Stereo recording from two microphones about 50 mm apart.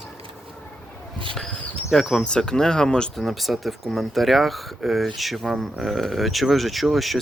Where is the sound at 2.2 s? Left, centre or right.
Centre.